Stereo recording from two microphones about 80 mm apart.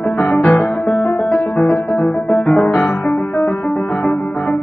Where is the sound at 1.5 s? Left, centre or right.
Centre.